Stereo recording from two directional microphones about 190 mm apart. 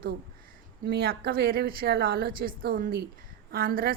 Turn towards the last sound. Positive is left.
turn(degrees=-50)  # may be behind; listen again after turning